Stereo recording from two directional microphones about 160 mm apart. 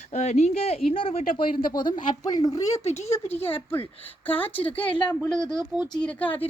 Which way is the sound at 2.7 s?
45° left (ahead or behind).